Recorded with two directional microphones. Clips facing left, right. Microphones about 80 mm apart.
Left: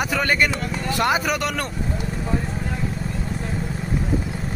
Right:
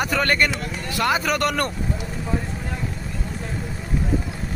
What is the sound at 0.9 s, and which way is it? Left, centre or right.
Speech, left.